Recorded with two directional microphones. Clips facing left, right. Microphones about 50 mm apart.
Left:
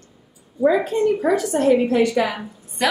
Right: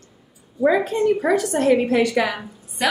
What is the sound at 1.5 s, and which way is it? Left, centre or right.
Speech, right.